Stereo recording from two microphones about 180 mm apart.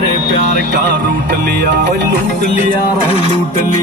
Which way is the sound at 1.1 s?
55° right (ahead or behind).